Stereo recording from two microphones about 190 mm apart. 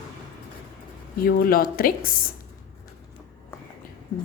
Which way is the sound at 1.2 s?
50° left (ahead or behind).